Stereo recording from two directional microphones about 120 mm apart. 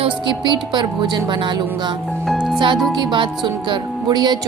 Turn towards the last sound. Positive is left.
turn(degrees=-35)  # may be behind; listen again after turning